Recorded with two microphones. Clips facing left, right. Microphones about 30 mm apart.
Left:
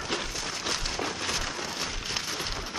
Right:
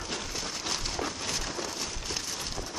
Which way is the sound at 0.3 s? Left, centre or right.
Centre.